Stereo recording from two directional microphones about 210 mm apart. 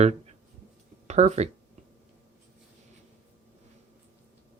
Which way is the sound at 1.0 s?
30° right (ahead or behind).